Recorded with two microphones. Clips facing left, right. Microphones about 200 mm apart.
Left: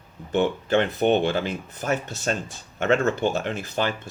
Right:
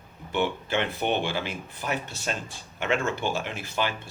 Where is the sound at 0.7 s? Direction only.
45° left (ahead or behind).